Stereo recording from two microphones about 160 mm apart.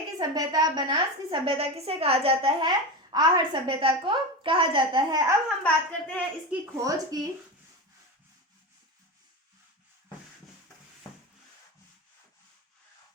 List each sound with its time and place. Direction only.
0.2 s a woman's voice: 25° right (ahead or behind)
5.6 s speech: 10° left (ahead or behind)
6.7 s speech: 20° right (ahead or behind)